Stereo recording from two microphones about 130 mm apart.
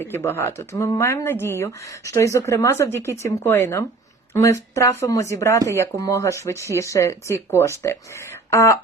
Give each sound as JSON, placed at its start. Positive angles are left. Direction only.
{"t": 0.0, "sound": "speech", "side_deg": 15}